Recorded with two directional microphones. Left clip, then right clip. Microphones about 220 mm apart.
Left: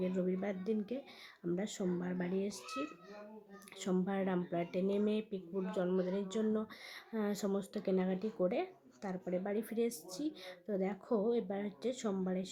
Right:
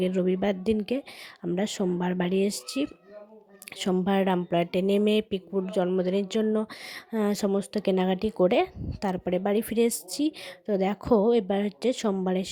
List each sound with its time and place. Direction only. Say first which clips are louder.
0.0 s speech: right 12 dB; 35° right (ahead or behind)